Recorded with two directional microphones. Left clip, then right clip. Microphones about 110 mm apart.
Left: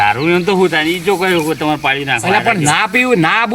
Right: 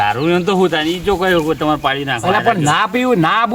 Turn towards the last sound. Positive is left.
turn(degrees=-15)  # may be behind; listen again after turning